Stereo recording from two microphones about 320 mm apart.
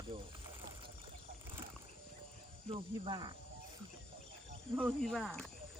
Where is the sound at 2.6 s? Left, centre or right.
Centre.